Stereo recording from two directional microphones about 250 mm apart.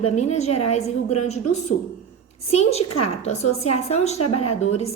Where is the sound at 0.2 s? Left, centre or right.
Left.